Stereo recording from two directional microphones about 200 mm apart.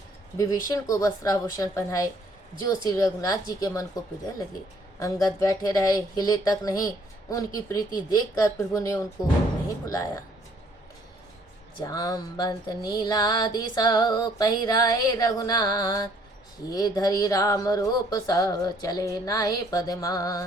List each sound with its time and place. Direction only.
0.3 s speech: 15° left (ahead or behind)
4.9 s speech: 15° left (ahead or behind)
11.8 s music: 20° left (ahead or behind)
16.6 s speech: 20° left (ahead or behind)